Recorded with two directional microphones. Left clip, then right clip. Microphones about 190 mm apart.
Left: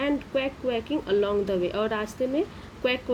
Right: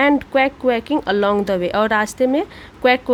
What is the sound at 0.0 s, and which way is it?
Speech, 45° right (ahead or behind).